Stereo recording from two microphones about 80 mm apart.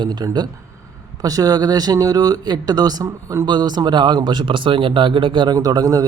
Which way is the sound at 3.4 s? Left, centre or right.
Right.